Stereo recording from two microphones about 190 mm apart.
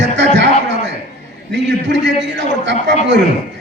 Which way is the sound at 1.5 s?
70° right (ahead or behind).